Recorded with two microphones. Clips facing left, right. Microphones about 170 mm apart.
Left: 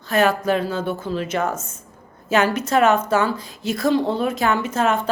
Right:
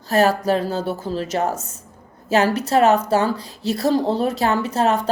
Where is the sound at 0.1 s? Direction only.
35° right (ahead or behind).